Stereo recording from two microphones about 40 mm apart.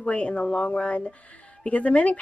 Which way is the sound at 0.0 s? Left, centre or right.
Left.